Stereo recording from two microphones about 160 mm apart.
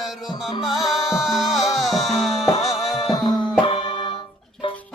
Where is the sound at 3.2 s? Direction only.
30° left (ahead or behind).